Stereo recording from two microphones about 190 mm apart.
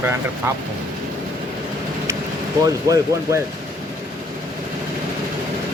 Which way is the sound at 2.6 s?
20° right (ahead or behind).